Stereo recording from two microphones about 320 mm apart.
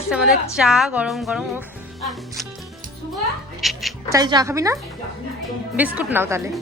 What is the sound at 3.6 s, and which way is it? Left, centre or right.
Speech, centre.